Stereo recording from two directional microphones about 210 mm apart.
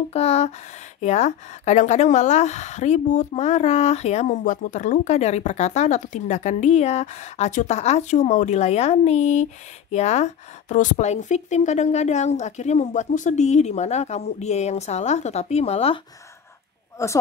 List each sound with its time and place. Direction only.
0.1 s a woman's voice: 30° left (ahead or behind)
17.0 s a woman's voice: 15° left (ahead or behind)